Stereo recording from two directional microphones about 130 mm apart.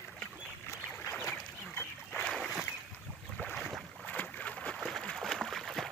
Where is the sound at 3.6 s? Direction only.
Centre (ahead or behind).